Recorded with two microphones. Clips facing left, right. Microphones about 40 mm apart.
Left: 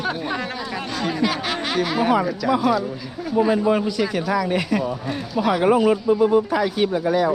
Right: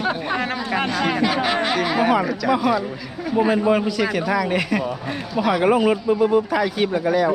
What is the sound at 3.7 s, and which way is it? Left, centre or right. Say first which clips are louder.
Speech: right 1 dB; right.